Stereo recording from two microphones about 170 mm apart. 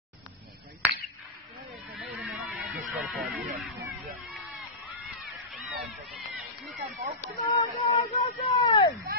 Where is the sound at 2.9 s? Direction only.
Centre (ahead or behind).